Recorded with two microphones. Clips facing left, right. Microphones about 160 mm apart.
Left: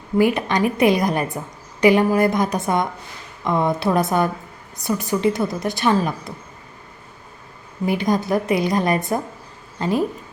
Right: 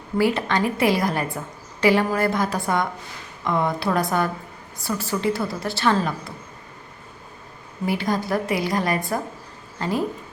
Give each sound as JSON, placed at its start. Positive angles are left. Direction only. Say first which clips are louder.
{"t": 0.2, "sound": "a woman's voice", "louder": "left 3 dB", "side_deg": 15}
{"t": 7.9, "sound": "a woman's voice", "louder": "left 4 dB", "side_deg": 20}